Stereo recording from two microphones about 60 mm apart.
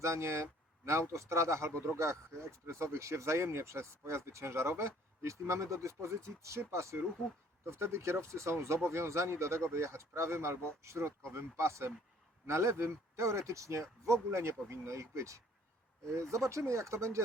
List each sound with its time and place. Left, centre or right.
0.0 s speech: right